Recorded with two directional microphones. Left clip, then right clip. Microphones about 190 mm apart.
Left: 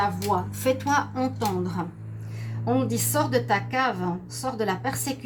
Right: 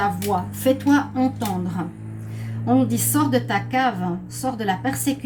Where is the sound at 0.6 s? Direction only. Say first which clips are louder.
Right 6 dB; 45° left (ahead or behind).